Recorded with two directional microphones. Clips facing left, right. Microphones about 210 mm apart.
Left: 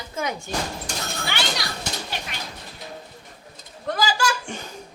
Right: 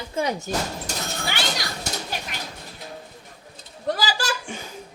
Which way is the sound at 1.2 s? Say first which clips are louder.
Even; 45° right (ahead or behind).